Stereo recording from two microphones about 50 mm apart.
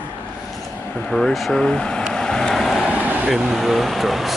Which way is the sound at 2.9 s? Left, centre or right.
Right.